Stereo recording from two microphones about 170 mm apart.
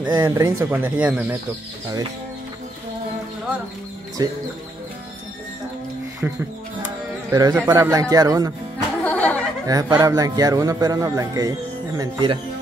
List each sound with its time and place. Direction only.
0.1 s speech: 20° right (ahead or behind)
4.2 s a man's voice: 20° right (ahead or behind)
6.2 s a man's voice: 10° right (ahead or behind)
9.0 s a sound: 10° left (ahead or behind)
9.7 s a man's voice: 20° right (ahead or behind)